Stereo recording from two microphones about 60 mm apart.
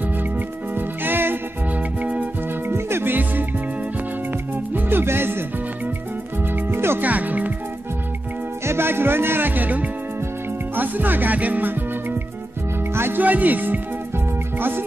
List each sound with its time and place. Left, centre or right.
0.7 s music: right
2.7 s music: right
4.7 s music: right
6.4 s music: right
7.0 s music: right
8.6 s music: right
13.2 s music: right